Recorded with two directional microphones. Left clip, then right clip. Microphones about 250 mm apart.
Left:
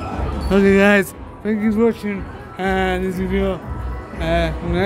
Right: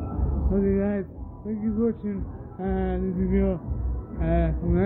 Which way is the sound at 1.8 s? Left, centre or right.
Centre.